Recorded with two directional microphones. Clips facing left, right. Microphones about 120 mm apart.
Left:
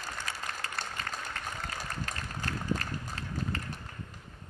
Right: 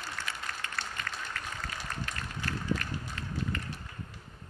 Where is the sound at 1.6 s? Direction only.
35° left (ahead or behind).